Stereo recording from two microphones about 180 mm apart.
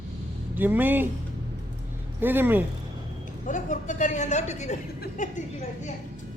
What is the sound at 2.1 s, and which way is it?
Speech, 10° right (ahead or behind).